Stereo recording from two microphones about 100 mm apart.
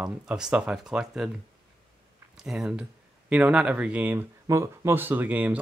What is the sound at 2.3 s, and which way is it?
Speech, 5° right (ahead or behind).